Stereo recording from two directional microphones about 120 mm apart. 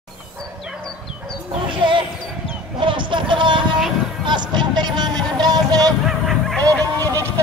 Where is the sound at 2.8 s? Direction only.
45° right (ahead or behind).